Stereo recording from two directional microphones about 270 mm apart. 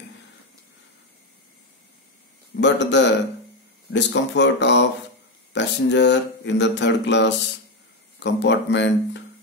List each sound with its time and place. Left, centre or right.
2.6 s speech: left